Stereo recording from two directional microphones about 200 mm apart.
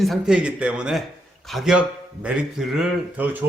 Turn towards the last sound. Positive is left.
turn(degrees=-10)  # may be behind; listen again after turning